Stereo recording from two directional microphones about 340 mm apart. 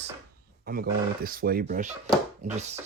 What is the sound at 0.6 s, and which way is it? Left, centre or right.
Speech, right.